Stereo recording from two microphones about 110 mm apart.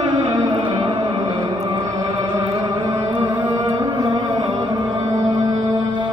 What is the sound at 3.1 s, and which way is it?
Music, 45° right (ahead or behind).